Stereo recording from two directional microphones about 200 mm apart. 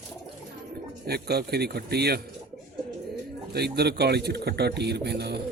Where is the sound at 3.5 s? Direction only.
55° right (ahead or behind).